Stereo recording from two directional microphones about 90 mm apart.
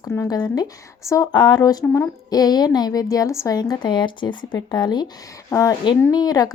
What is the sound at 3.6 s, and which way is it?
Speech, 55° left (ahead or behind).